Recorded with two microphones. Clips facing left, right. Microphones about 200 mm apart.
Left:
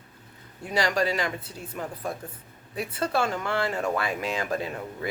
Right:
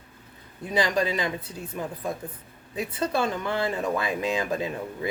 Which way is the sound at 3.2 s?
20° right (ahead or behind).